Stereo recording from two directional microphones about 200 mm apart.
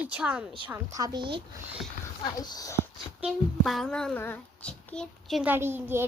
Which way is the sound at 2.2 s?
20° left (ahead or behind).